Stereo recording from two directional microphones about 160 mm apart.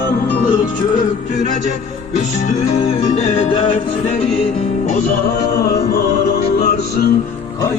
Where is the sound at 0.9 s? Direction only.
50° left (ahead or behind).